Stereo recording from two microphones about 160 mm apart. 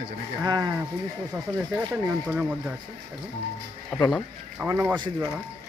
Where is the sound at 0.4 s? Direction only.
25° right (ahead or behind).